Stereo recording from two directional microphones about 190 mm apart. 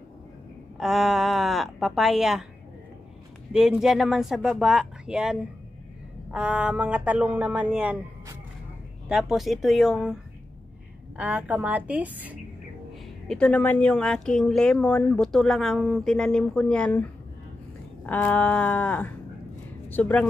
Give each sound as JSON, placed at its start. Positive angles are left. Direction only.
{"t": 0.7, "sound": "a woman's voice", "side_deg": 0}
{"t": 3.5, "sound": "a woman's voice", "side_deg": -5}
{"t": 9.1, "sound": "a woman's voice", "side_deg": 0}
{"t": 11.1, "sound": "speech", "side_deg": -5}
{"t": 13.3, "sound": "a woman's voice", "side_deg": 5}
{"t": 18.0, "sound": "a sound", "side_deg": 10}